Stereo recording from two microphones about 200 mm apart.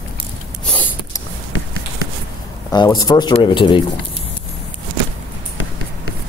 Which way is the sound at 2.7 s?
20° left (ahead or behind).